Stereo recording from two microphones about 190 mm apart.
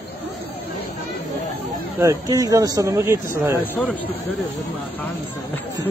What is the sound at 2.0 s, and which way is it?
Speech, 15° right (ahead or behind).